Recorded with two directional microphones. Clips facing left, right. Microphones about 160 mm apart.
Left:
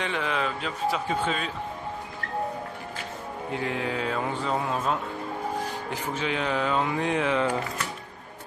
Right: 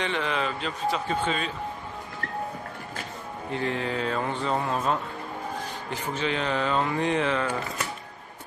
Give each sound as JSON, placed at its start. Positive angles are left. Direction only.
{"t": 0.0, "sound": "speech", "side_deg": 5}
{"t": 3.5, "sound": "speech", "side_deg": 5}